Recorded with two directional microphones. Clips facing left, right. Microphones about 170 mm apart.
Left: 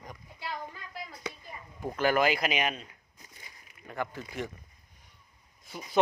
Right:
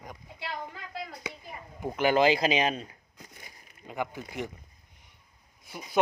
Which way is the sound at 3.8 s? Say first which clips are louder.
Right 2 dB; 15° right (ahead or behind).